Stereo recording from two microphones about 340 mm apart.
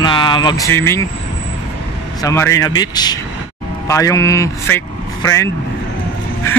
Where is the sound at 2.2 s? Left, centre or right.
Centre.